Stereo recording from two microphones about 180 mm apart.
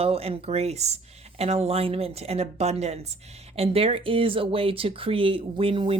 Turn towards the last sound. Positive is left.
turn(degrees=-30)  # may be behind; listen again after turning